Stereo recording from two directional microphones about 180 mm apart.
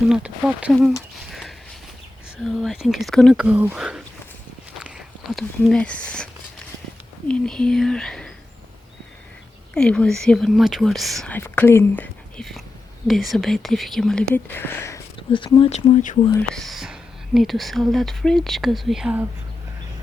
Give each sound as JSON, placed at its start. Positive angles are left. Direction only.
{"t": 0.1, "sound": "speech", "side_deg": -5}
{"t": 1.3, "sound": "a sound", "side_deg": 0}
{"t": 2.4, "sound": "speech", "side_deg": 0}
{"t": 7.3, "sound": "speech", "side_deg": 5}
{"t": 9.7, "sound": "speech", "side_deg": 5}
{"t": 15.7, "sound": "speech", "side_deg": 45}
{"t": 16.6, "sound": "speech", "side_deg": 0}